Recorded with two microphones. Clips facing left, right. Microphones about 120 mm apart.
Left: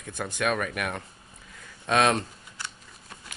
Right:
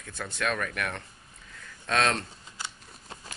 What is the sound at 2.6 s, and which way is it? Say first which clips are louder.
Shuffling cards: even; 25° right (ahead or behind).